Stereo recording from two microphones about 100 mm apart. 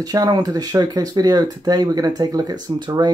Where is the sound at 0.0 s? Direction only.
40° right (ahead or behind).